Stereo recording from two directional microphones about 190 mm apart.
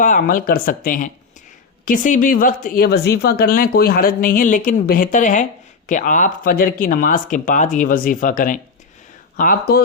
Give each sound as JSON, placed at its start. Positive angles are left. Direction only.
{"t": 0.0, "sound": "speech", "side_deg": 45}